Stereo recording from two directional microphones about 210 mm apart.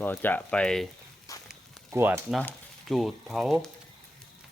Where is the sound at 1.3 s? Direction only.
15° left (ahead or behind).